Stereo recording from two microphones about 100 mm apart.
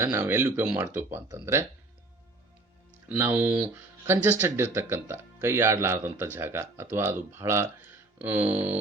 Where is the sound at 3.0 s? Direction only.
20° right (ahead or behind).